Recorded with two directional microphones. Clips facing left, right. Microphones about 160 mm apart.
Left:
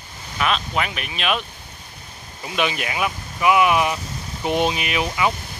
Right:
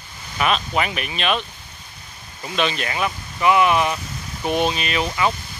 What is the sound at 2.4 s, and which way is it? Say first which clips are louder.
Speech: right 1 dB; 10° left (ahead or behind).